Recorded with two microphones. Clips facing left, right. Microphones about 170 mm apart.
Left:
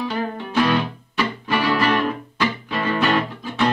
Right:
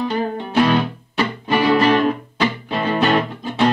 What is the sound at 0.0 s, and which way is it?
Music, 20° right (ahead or behind).